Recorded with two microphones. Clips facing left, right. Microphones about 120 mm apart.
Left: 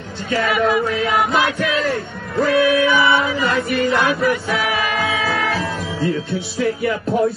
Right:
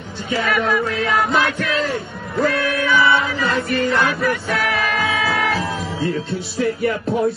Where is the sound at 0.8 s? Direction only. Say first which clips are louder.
Left 1 dB; centre (ahead or behind).